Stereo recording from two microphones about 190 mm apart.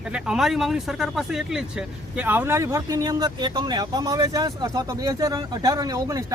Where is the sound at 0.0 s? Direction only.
5° right (ahead or behind).